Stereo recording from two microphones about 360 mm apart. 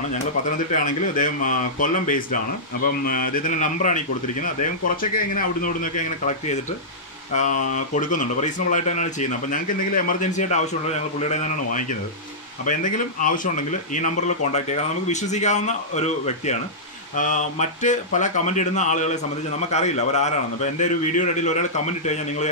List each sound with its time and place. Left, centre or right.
0.5 s speech: left